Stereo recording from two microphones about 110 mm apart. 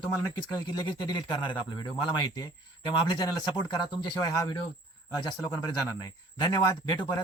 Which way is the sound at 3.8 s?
45° left (ahead or behind).